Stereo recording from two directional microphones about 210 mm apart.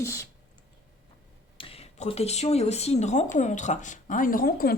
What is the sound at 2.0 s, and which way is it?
A woman's voice, 30° left (ahead or behind).